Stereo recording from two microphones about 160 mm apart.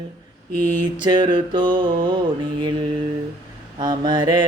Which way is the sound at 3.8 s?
25° right (ahead or behind).